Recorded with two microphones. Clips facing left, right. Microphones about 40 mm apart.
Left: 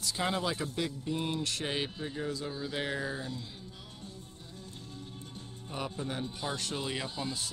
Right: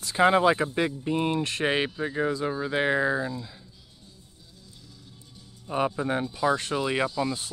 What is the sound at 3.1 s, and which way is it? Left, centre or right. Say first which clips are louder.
Speech: right 10 dB; right.